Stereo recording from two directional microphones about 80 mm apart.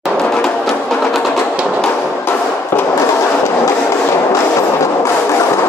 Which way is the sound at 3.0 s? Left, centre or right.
Left.